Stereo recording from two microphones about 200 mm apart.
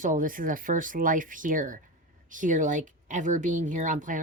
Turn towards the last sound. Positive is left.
turn(degrees=-40)  # may be behind; listen again after turning